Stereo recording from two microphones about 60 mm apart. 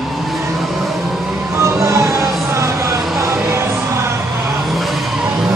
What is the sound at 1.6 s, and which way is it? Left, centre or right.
Music, right.